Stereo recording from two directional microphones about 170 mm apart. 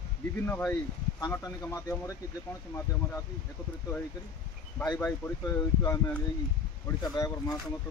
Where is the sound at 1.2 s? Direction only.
20° left (ahead or behind).